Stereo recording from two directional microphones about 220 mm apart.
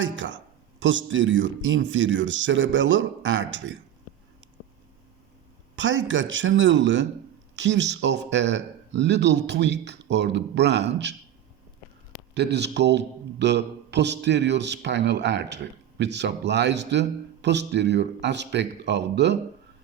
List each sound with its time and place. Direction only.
0.0 s speech: 55° right (ahead or behind)
5.7 s a man's voice: 60° right (ahead or behind)
12.3 s a man's voice: 50° right (ahead or behind)